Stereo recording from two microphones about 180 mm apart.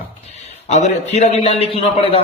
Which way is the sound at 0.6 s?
40° left (ahead or behind).